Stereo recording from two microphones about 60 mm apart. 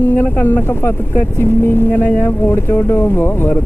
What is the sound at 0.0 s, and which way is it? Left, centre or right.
Speech, left.